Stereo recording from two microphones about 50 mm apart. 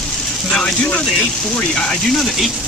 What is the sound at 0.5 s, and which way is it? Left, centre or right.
Speech, centre.